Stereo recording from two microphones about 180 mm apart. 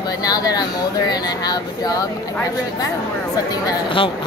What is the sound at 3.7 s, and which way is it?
Speech, 30° left (ahead or behind).